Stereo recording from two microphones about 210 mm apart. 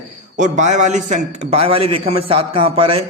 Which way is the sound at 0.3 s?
35° right (ahead or behind).